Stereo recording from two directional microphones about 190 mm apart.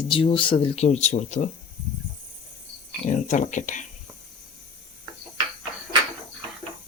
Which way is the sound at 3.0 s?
40° left (ahead or behind).